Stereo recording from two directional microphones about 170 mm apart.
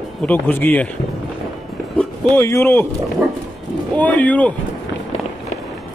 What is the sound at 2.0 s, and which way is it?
Speech, 15° left (ahead or behind).